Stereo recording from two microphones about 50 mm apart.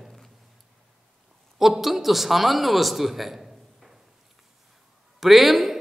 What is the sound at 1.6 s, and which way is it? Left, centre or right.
A man's voice, centre.